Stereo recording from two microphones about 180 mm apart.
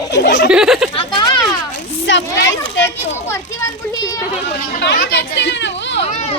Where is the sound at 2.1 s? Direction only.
90° left.